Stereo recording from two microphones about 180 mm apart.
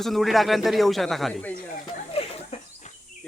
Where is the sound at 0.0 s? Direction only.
Centre (ahead or behind).